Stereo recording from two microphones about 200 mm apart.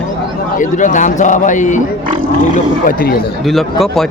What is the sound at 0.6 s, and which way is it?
Speech, 40° left (ahead or behind).